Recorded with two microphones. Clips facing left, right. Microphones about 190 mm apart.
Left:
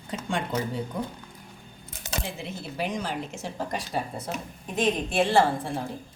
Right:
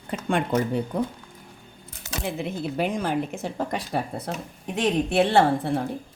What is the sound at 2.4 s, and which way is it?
Speech, 55° right (ahead or behind).